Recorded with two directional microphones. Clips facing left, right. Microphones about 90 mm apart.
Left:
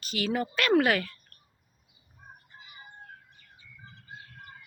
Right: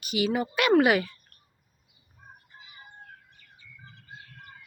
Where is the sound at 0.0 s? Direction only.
15° right (ahead or behind).